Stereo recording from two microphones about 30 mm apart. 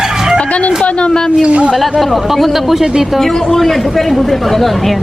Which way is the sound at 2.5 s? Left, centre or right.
Centre.